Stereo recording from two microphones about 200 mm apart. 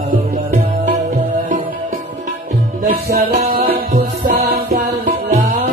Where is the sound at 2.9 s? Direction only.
45° right (ahead or behind).